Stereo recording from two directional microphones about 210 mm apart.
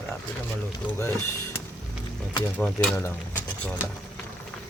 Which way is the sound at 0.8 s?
15° left (ahead or behind).